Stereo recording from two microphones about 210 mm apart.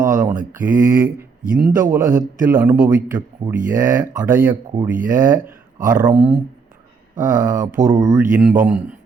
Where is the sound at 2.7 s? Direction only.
40° right (ahead or behind).